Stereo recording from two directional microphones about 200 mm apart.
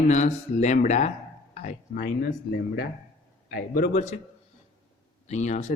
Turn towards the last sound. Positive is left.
turn(degrees=35)  # may be behind; listen again after turning